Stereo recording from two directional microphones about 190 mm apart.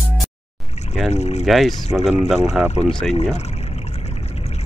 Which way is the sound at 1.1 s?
35° left (ahead or behind).